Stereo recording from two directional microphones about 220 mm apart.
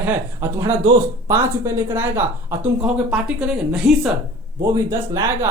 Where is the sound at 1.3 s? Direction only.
10° right (ahead or behind).